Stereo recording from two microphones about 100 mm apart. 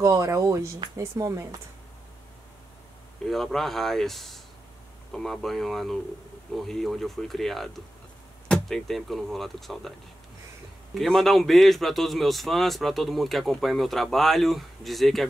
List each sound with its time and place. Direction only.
0.0 s speech: 35° right (ahead or behind)
3.3 s a man's voice: centre (ahead or behind)
11.0 s a man's voice: centre (ahead or behind)